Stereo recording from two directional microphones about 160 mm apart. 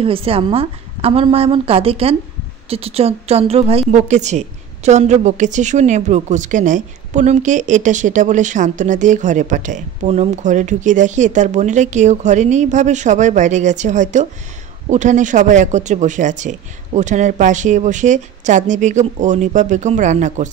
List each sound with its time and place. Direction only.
0.0 s a woman's voice: 35° right (ahead or behind)